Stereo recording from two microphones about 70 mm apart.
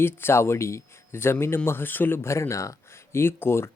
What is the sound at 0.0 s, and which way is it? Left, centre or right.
Speech, left.